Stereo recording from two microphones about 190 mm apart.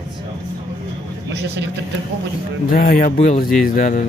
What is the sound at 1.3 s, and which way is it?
Speech, 65° right (ahead or behind).